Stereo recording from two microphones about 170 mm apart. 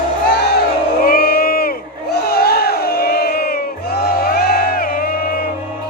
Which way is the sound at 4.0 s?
60° left (ahead or behind).